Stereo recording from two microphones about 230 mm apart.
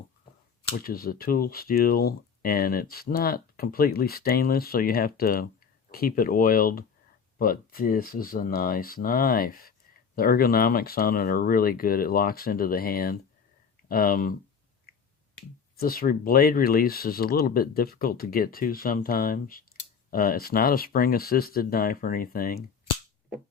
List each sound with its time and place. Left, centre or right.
0.7 s speech: left
15.8 s speech: left